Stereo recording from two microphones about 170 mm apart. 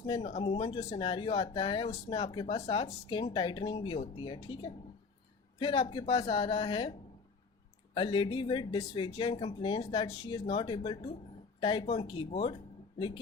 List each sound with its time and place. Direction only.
0.0 s speech: 30° left (ahead or behind)
7.9 s speech: 30° left (ahead or behind)